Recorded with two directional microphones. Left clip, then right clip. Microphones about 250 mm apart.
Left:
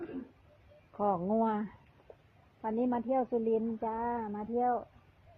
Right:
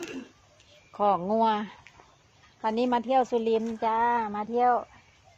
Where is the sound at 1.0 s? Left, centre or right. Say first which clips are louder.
Right 7 dB; centre.